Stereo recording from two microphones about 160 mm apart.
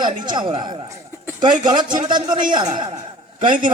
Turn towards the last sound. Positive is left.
turn(degrees=-55)  # may be behind; listen again after turning